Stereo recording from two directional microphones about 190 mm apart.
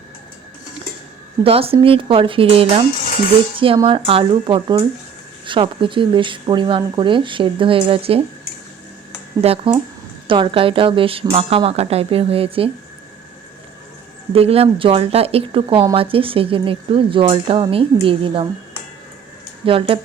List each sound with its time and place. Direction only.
1.5 s speech: 30° right (ahead or behind)
9.4 s speech: 30° right (ahead or behind)
14.3 s speech: 30° right (ahead or behind)
19.6 s speech: 30° right (ahead or behind)